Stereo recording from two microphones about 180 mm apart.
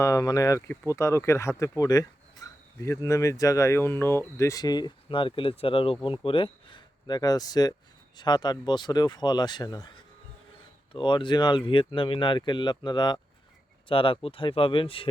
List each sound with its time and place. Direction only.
0.0 s speech: 20° left (ahead or behind)
10.9 s speech: 25° left (ahead or behind)